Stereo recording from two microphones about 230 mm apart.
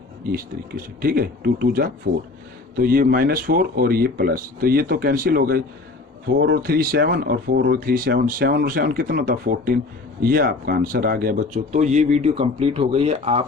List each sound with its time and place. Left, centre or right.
1.0 s speech: right